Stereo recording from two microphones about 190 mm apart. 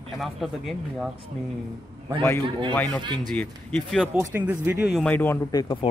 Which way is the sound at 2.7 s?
5° left (ahead or behind).